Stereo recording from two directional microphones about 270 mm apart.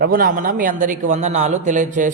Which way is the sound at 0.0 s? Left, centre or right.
Right.